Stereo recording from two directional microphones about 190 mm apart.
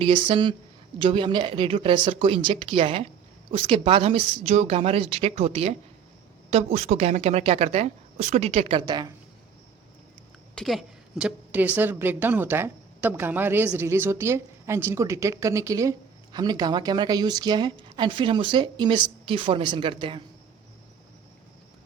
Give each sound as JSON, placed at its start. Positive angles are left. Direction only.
{"t": 0.0, "sound": "a woman's voice", "side_deg": -25}
{"t": 10.5, "sound": "a woman's voice", "side_deg": 0}